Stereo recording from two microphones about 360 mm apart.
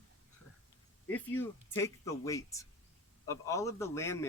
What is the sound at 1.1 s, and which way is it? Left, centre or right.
A man's voice, centre.